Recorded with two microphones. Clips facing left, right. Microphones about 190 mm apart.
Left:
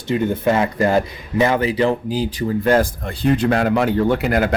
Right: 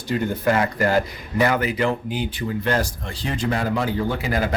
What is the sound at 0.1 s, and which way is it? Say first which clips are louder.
Speech: left 3 dB; 25° left (ahead or behind).